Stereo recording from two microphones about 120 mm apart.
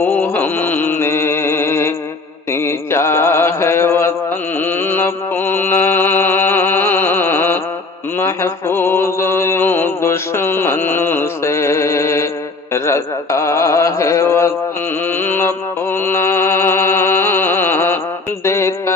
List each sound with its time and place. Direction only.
0.0 s mantra: 15° left (ahead or behind)
16.0 s music: 20° left (ahead or behind)
18.4 s a sound: 20° left (ahead or behind)